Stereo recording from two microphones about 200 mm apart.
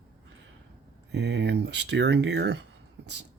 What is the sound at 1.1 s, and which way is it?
Speech, 60° right (ahead or behind).